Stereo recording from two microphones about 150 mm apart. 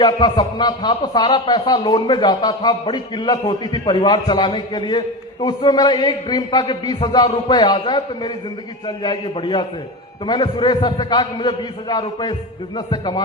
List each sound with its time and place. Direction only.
0.0 s a man's voice: 30° left (ahead or behind)